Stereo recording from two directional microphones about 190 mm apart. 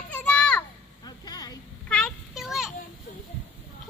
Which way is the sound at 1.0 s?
20° left (ahead or behind).